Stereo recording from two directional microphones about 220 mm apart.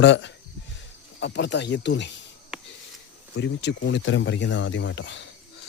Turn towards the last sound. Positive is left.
turn(degrees=55)  # may be behind; listen again after turning